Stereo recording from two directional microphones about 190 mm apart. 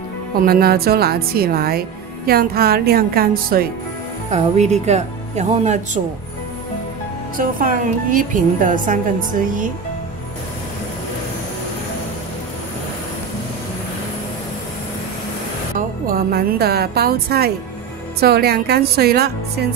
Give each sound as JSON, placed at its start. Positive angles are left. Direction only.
{"t": 0.4, "sound": "speech", "side_deg": -50}
{"t": 4.3, "sound": "speech", "side_deg": -35}
{"t": 7.3, "sound": "speech", "side_deg": -45}
{"t": 16.1, "sound": "a woman's voice", "side_deg": -50}